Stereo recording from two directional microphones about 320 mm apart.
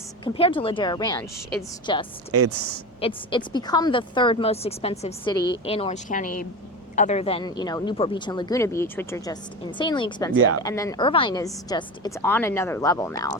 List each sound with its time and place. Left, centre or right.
0.3 s speech: centre
2.3 s speech: right
3.0 s speech: centre
10.3 s speech: right
10.6 s speech: centre